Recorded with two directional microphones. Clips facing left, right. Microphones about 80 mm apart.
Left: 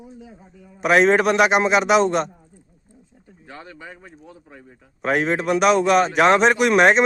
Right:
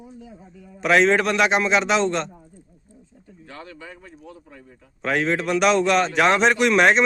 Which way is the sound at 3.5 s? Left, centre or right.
Centre.